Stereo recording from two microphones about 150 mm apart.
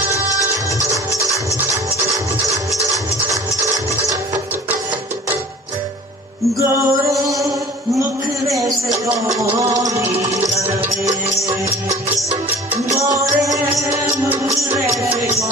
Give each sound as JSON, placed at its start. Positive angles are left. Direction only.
{"t": 0.8, "sound": "music", "side_deg": -20}
{"t": 2.9, "sound": "music", "side_deg": -25}
{"t": 6.7, "sound": "music", "side_deg": -20}
{"t": 8.5, "sound": "a sound", "side_deg": -20}
{"t": 9.3, "sound": "music", "side_deg": -20}
{"t": 12.9, "sound": "music", "side_deg": -20}